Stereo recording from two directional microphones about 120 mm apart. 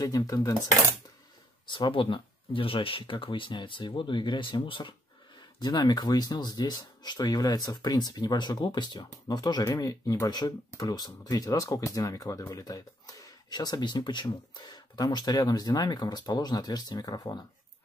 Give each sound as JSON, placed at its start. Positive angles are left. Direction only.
{"t": 0.0, "sound": "speech", "side_deg": 30}
{"t": 1.7, "sound": "speech", "side_deg": 40}